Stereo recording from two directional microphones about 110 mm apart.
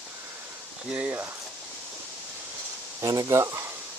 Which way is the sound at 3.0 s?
35° right (ahead or behind).